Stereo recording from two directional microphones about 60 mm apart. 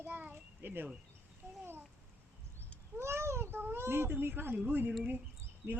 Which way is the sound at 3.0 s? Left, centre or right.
Right.